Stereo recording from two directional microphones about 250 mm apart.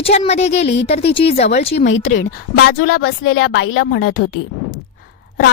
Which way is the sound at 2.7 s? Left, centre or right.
Left.